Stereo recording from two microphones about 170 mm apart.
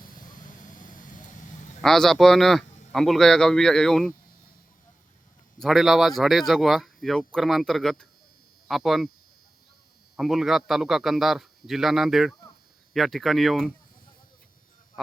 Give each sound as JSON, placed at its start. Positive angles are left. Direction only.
{"t": 0.8, "sound": "vehicle", "side_deg": 50}
{"t": 1.8, "sound": "speech", "side_deg": 0}
{"t": 5.5, "sound": "speech", "side_deg": 0}
{"t": 10.2, "sound": "speech", "side_deg": 0}
{"t": 15.0, "sound": "speech", "side_deg": 0}